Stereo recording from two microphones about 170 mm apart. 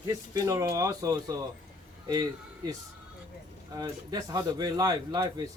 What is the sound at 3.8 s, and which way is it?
A man's voice, 25° right (ahead or behind).